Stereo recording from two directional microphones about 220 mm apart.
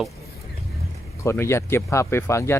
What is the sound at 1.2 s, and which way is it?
Speech, 10° left (ahead or behind).